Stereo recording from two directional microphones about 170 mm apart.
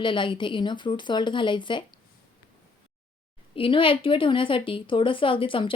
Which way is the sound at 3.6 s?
30° left (ahead or behind).